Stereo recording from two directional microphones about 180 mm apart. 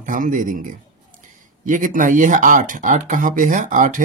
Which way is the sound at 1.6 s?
50° right (ahead or behind).